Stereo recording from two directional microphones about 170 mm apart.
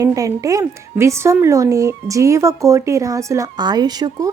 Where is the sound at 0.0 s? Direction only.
20° right (ahead or behind).